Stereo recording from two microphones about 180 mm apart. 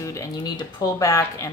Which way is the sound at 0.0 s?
15° left (ahead or behind).